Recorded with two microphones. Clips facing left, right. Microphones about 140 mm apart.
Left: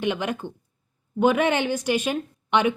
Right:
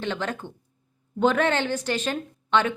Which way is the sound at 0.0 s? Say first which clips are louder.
Left 3 dB; 15° left (ahead or behind).